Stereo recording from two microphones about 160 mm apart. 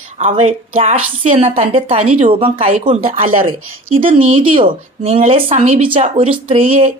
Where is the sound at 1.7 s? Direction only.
35° right (ahead or behind).